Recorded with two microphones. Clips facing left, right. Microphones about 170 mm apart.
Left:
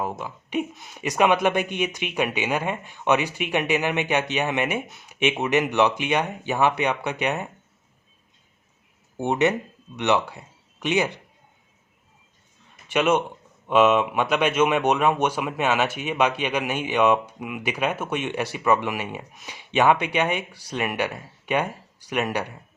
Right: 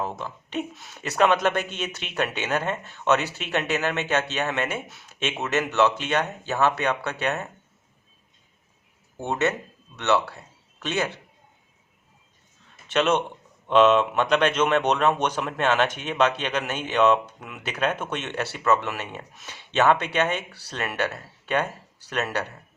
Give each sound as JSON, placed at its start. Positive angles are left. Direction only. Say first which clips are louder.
{"t": 0.0, "sound": "speech", "louder": "left 1 dB", "side_deg": 10}
{"t": 9.1, "sound": "speech", "louder": "left 4 dB", "side_deg": 15}
{"t": 12.9, "sound": "speech", "louder": "left 1 dB", "side_deg": 10}